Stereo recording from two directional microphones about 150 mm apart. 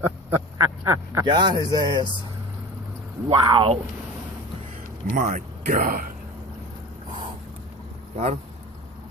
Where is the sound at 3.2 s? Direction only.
35° right (ahead or behind).